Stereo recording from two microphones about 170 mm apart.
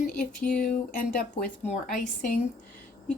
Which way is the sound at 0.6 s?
50° left (ahead or behind).